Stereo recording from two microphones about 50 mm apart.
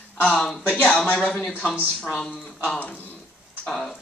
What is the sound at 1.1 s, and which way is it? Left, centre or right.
Speech, centre.